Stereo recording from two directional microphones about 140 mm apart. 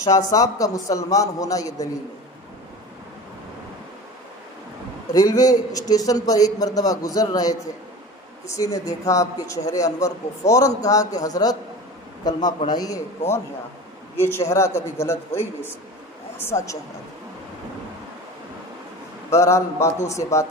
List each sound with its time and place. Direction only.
0.3 s a man's voice: 25° left (ahead or behind)
5.1 s a man's voice: 25° left (ahead or behind)
19.3 s a man's voice: 20° left (ahead or behind)